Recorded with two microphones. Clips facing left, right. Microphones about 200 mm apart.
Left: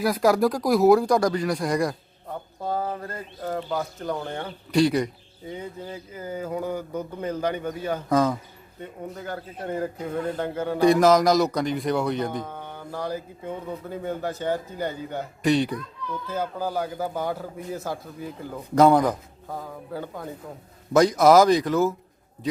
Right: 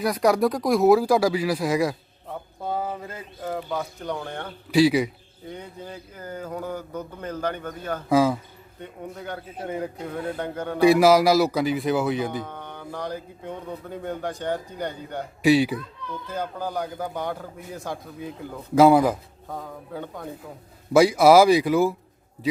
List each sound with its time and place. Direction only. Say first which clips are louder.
0.0 s speech: even; centre (ahead or behind)
4.7 s speech: right 2 dB; 5° right (ahead or behind)
8.1 s speech: right 3 dB; 5° right (ahead or behind)
10.4 s speech: left 3 dB; 5° left (ahead or behind)
10.8 s speech: right 1 dB; 10° right (ahead or behind)
12.5 s speech: even; 10° left (ahead or behind)
15.4 s speech: right 3 dB; 5° right (ahead or behind)
16.2 s speech: left 2 dB; 5° left (ahead or behind)
20.9 s speech: right 1 dB; 10° right (ahead or behind)